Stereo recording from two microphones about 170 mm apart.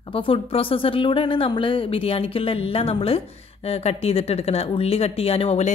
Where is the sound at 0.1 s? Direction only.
35° left (ahead or behind).